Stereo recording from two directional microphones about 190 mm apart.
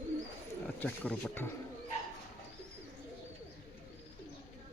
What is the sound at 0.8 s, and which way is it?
Speech, 10° left (ahead or behind).